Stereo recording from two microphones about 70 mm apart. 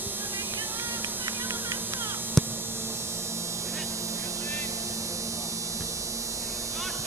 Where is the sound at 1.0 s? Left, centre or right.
Right.